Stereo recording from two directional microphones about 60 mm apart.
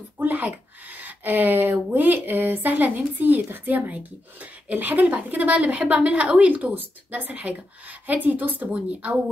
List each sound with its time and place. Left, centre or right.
0.2 s speech: right